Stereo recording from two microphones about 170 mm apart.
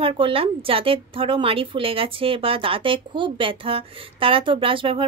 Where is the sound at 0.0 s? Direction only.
30° right (ahead or behind).